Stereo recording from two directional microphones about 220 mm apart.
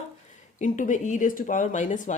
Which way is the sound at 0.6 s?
35° left (ahead or behind).